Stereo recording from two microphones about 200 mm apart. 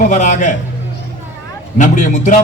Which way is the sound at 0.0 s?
35° left (ahead or behind).